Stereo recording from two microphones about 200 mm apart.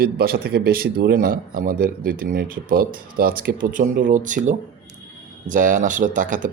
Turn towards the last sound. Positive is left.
turn(degrees=-40)  # may be behind; listen again after turning